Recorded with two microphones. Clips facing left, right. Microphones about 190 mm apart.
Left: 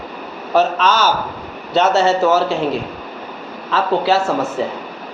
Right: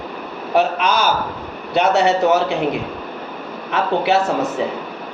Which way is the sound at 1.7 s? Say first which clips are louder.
Left 1 dB; 15° right (ahead or behind).